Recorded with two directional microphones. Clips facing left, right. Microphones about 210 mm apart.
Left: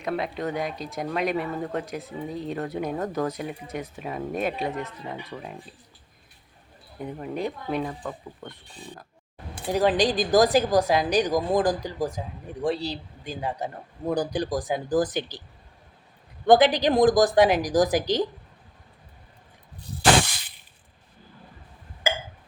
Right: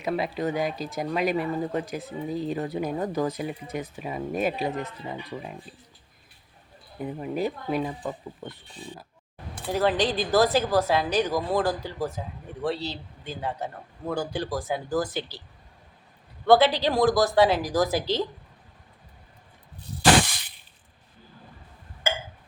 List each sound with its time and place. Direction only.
0.0 s speech: centre (ahead or behind)
7.0 s speech: 5° right (ahead or behind)
9.6 s speech: 15° left (ahead or behind)
16.5 s speech: 15° left (ahead or behind)